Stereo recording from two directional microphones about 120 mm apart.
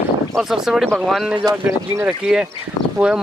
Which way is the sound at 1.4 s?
30° right (ahead or behind).